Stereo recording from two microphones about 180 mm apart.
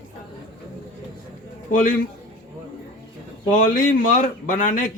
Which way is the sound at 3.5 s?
50° left (ahead or behind).